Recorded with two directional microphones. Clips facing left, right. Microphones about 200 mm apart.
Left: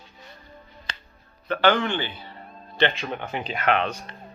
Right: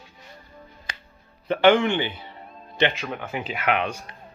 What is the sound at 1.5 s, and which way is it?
Speech, 25° right (ahead or behind).